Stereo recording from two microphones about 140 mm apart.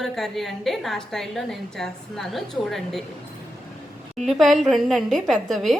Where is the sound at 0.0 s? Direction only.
Centre (ahead or behind).